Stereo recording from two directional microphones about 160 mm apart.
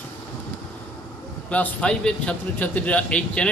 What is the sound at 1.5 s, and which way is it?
A man's voice, 10° left (ahead or behind).